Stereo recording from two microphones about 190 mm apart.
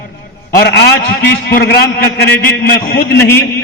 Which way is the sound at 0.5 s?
60° left (ahead or behind).